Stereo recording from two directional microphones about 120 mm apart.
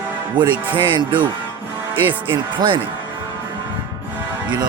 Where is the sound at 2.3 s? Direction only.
45° right (ahead or behind).